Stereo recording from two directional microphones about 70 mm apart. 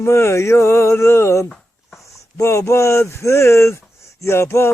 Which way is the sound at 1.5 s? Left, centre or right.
Centre.